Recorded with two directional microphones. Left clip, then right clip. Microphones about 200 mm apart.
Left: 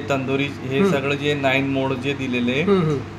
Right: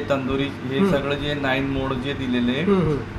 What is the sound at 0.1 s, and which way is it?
A man's voice, 40° left (ahead or behind).